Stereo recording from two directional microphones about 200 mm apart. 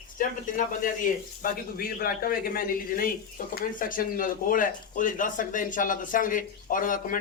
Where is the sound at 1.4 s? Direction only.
45° left (ahead or behind).